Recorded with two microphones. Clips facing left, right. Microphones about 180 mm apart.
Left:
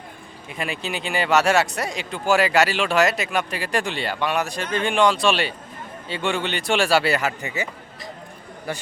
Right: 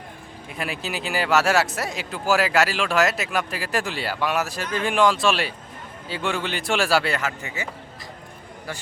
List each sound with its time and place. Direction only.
0.5 s speech: centre (ahead or behind)
7.2 s speech: 15° left (ahead or behind)